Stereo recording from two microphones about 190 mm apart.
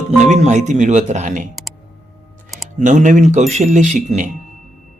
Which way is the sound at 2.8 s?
40° right (ahead or behind).